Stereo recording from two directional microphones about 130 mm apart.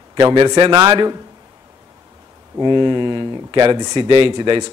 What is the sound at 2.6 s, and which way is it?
A man's voice, 35° right (ahead or behind).